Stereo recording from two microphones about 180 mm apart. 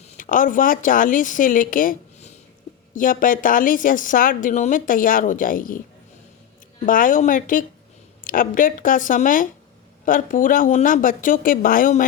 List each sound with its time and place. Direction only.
0.0 s a woman's voice: 50° left (ahead or behind)
6.8 s a woman's voice: 50° left (ahead or behind)